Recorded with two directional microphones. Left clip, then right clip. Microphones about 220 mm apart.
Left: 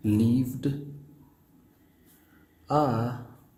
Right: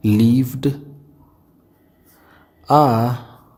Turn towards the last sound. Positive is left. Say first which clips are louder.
# right 12 dB
turn(degrees=-45)  # may be behind; listen again after turning